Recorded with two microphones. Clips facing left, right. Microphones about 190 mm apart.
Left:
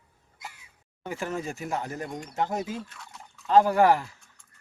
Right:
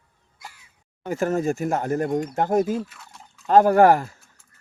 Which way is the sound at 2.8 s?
5° right (ahead or behind).